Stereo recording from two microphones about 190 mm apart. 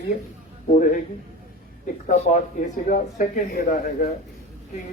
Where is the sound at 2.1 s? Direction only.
35° left (ahead or behind).